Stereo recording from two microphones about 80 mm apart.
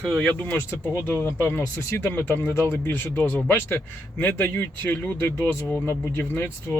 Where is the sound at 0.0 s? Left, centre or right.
Centre.